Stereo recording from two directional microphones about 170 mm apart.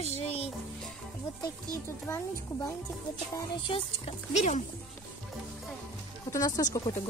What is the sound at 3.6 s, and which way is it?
Speech, 35° left (ahead or behind).